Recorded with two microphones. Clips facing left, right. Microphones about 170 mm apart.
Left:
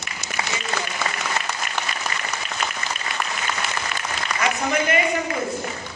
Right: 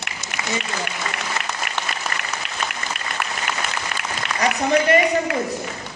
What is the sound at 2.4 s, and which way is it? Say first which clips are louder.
Applause: even; 70° right (ahead or behind).